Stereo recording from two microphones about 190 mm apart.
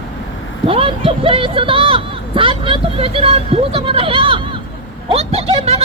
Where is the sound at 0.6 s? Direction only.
30° right (ahead or behind).